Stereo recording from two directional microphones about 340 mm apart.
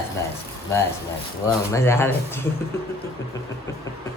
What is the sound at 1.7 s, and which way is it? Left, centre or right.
Speech, centre.